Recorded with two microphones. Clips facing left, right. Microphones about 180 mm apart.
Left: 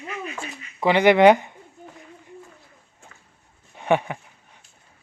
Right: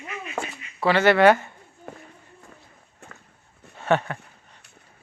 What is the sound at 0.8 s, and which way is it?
Speech, 15° left (ahead or behind).